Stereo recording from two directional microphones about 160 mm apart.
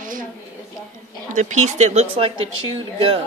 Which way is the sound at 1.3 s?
50° right (ahead or behind).